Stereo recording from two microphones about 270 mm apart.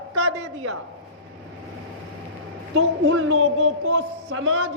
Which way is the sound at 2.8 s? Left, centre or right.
Right.